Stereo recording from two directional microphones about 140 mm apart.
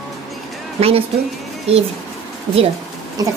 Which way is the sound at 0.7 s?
45° right (ahead or behind).